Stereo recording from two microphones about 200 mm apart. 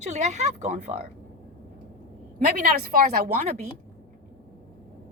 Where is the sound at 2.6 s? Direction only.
45° right (ahead or behind).